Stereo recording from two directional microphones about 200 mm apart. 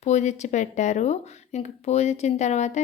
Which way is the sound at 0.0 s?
35° left (ahead or behind).